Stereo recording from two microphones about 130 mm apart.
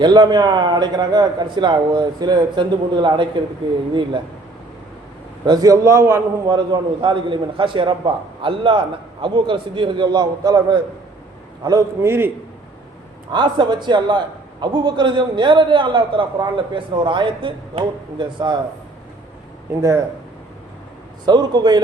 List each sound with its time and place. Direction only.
0.0 s a man's voice: 35° right (ahead or behind)
5.5 s a man's voice: 30° right (ahead or behind)
6.5 s a man's voice: 35° right (ahead or behind); by 12.3 s 20° right (ahead or behind)
13.3 s a man's voice: 35° right (ahead or behind)
19.8 s a man's voice: 25° right (ahead or behind)
21.2 s a man's voice: 30° right (ahead or behind)